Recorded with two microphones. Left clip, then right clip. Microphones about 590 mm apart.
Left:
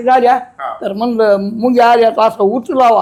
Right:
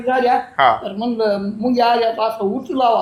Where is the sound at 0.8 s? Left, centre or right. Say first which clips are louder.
Left 7 dB; left.